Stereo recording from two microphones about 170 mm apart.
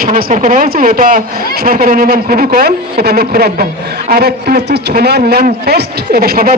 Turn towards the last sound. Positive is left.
turn(degrees=-60)  # may be behind; listen again after turning